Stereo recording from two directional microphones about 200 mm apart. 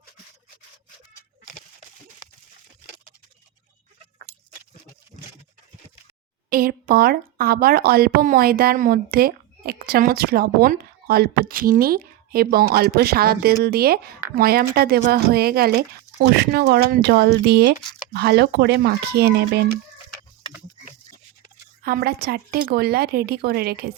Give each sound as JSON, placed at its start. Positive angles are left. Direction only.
{"t": 6.5, "sound": "speech", "side_deg": -45}
{"t": 21.8, "sound": "speech", "side_deg": -50}